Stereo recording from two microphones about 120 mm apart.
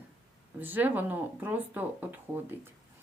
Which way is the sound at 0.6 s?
15° right (ahead or behind).